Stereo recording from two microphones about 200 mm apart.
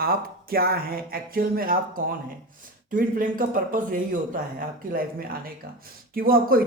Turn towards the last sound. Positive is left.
turn(degrees=-45)  # may be behind; listen again after turning